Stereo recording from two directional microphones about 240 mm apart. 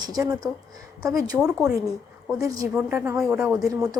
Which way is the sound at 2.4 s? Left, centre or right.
Centre.